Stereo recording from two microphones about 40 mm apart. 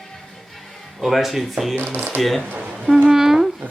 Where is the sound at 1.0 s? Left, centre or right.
Centre.